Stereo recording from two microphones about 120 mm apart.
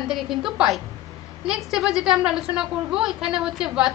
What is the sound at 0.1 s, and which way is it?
A woman's voice, centre (ahead or behind).